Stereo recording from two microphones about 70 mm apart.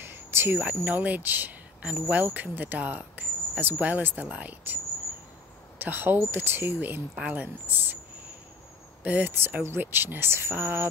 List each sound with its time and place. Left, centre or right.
0.0 s cricket: right
0.8 s speech: right
5.8 s speech: right
9.0 s speech: right
9.4 s speech: right